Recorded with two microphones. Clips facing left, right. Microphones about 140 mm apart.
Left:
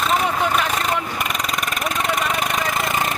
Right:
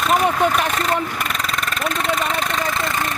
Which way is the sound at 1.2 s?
10° left (ahead or behind).